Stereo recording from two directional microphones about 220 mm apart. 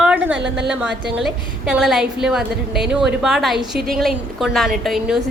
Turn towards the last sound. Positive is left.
turn(degrees=0)  # may be behind; listen again after turning